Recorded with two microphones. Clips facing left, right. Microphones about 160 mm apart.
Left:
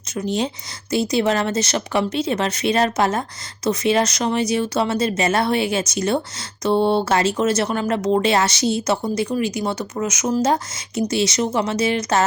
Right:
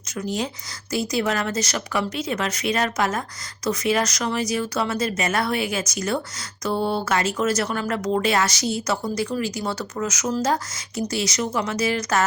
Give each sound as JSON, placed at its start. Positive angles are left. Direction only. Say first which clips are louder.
{"t": 0.2, "sound": "speech", "louder": "left 4 dB", "side_deg": 25}